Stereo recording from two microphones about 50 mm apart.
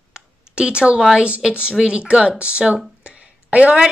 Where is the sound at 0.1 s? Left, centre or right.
Centre.